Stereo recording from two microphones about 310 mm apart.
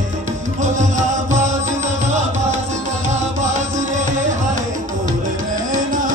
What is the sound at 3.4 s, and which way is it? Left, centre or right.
Music, right.